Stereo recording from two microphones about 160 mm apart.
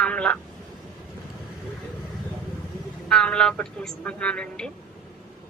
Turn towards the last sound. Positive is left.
turn(degrees=5)  # may be behind; listen again after turning